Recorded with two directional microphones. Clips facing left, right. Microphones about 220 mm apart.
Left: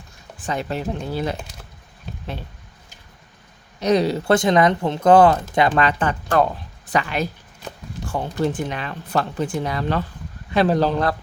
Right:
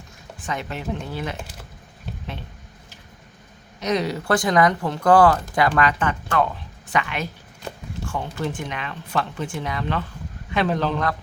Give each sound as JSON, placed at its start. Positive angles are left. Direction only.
{"t": 0.4, "sound": "speech", "side_deg": 35}
{"t": 3.8, "sound": "speech", "side_deg": 30}